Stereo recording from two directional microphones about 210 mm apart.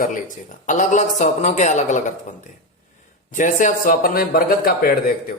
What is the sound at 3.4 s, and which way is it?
A man's voice, 35° left (ahead or behind).